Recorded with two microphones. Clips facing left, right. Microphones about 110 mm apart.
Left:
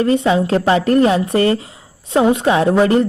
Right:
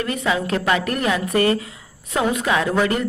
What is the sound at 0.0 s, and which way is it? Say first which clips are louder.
A woman's voice: left 8 dB; 30° left (ahead or behind).